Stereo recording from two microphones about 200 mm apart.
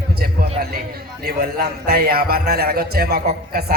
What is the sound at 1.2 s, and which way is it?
A man's voice, 50° right (ahead or behind).